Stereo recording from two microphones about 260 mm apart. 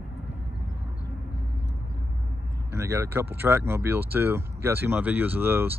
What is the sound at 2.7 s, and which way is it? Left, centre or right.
Speech, centre.